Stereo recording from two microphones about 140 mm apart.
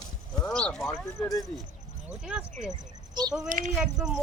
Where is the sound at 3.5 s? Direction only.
75° right (ahead or behind).